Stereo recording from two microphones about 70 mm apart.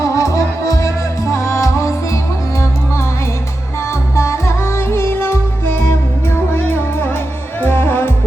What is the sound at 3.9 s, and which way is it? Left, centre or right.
Music, left.